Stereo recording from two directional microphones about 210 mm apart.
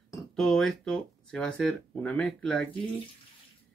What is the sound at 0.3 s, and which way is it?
Speech, 5° left (ahead or behind).